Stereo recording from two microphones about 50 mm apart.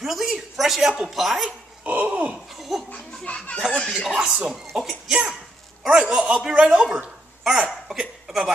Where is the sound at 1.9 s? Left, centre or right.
Right.